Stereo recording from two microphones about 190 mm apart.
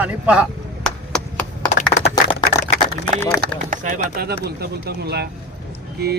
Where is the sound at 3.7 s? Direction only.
45° right (ahead or behind).